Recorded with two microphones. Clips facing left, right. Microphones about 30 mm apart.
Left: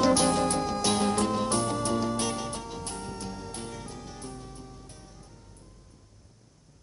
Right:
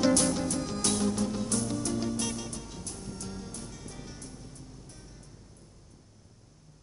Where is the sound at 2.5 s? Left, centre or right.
Left.